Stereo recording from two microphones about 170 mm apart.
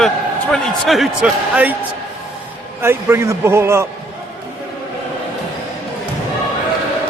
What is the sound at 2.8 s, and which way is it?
A man's voice, 15° right (ahead or behind).